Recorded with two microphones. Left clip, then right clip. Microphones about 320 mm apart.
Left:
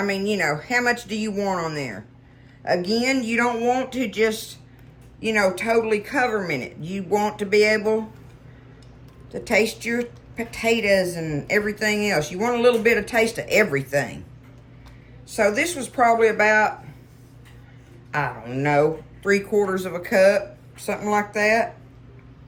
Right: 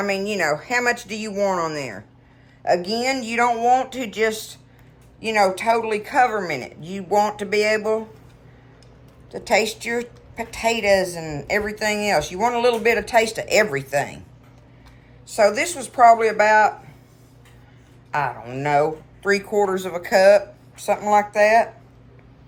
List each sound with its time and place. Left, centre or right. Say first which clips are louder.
0.0 s speech: right 1 dB; centre
9.3 s speech: right 1 dB; centre
15.3 s speech: right 3 dB; centre
18.1 s speech: right 2 dB; centre